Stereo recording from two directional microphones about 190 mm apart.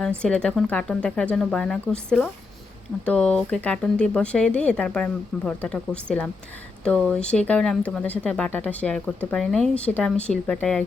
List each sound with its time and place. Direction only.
0.2 s speech: 5° left (ahead or behind)